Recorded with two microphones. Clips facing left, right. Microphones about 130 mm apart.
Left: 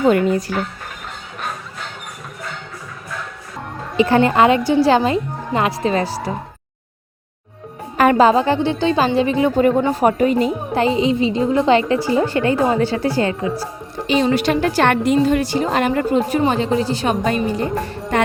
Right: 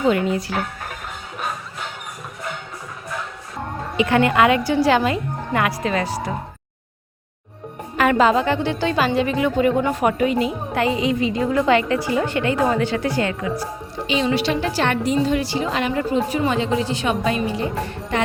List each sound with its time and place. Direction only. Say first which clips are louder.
0.0 s a woman's voice: left 4 dB; 45° left (ahead or behind)
1.4 s music: even; 5° right (ahead or behind)
3.9 s a woman's voice: left 3 dB; 35° left (ahead or behind)
7.9 s a woman's voice: left 4 dB; 35° left (ahead or behind)
9.6 s a woman's voice: left 2 dB; 40° left (ahead or behind)
14.1 s a woman's voice: left 4 dB; 45° left (ahead or behind)
16.4 s a woman's voice: left 3 dB; 40° left (ahead or behind)